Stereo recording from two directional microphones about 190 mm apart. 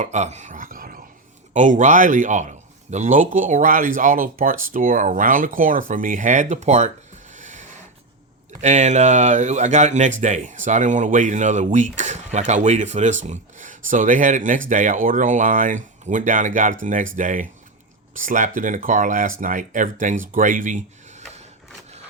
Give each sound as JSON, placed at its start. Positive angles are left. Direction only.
{"t": 0.0, "sound": "a man's voice", "side_deg": -35}
{"t": 7.3, "sound": "a sound", "side_deg": -40}
{"t": 8.6, "sound": "a man's voice", "side_deg": -40}